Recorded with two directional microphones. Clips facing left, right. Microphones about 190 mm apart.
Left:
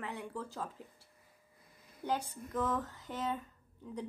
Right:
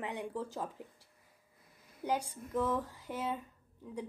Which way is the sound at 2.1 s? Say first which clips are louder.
Right 1 dB; 10° right (ahead or behind).